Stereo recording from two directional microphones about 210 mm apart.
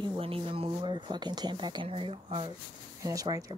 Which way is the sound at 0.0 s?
25° right (ahead or behind).